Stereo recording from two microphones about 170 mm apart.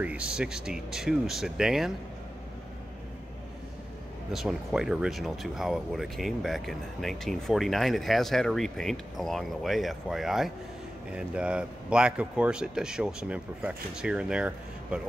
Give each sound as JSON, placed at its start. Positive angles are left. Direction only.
{"t": 0.0, "sound": "speech", "side_deg": -5}
{"t": 4.3, "sound": "speech", "side_deg": -5}